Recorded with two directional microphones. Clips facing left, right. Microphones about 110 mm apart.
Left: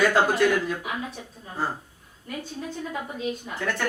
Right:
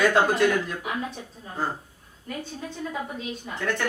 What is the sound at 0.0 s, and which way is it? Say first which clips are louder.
A man's voice: even; centre (ahead or behind).